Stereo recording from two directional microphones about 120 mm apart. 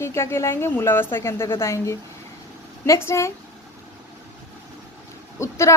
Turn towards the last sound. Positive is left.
turn(degrees=25)  # may be behind; listen again after turning